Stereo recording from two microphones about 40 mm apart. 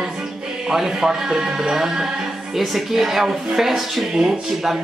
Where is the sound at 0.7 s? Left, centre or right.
Centre.